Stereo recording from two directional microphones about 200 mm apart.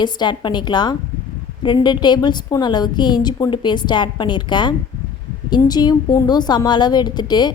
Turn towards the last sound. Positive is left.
turn(degrees=20)  # may be behind; listen again after turning